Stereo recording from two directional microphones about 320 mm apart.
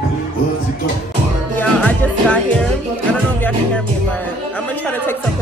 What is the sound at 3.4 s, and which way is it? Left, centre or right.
Music, centre.